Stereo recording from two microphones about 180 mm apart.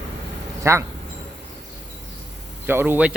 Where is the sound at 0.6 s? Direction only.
15° right (ahead or behind).